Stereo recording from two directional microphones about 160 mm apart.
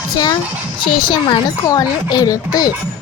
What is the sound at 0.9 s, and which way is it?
A child's voice, 30° left (ahead or behind).